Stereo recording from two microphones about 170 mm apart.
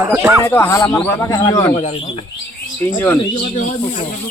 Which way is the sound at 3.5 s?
45° left (ahead or behind).